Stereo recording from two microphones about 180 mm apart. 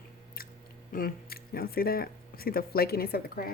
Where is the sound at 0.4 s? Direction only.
55° left (ahead or behind).